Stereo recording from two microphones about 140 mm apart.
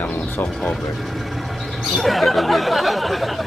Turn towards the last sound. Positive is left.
turn(degrees=0)  # may be behind; listen again after turning